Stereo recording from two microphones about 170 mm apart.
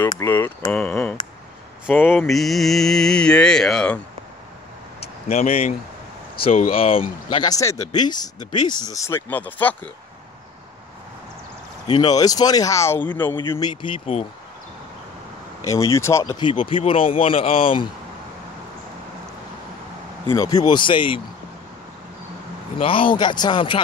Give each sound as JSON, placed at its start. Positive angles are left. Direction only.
{"t": 0.1, "sound": "speech", "side_deg": 15}
{"t": 2.2, "sound": "speech", "side_deg": 0}
{"t": 5.0, "sound": "speech", "side_deg": 40}
{"t": 6.8, "sound": "speech", "side_deg": 35}
{"t": 12.2, "sound": "speech", "side_deg": 20}
{"t": 13.5, "sound": "speech", "side_deg": 25}
{"t": 15.6, "sound": "speech", "side_deg": 20}
{"t": 16.3, "sound": "speech", "side_deg": 30}
{"t": 20.2, "sound": "speech", "side_deg": 20}
{"t": 22.8, "sound": "speech", "side_deg": 30}